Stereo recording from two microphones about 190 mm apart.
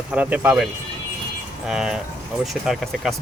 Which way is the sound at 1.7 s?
5° right (ahead or behind).